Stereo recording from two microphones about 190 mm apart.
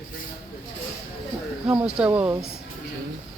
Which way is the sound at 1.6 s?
5° right (ahead or behind).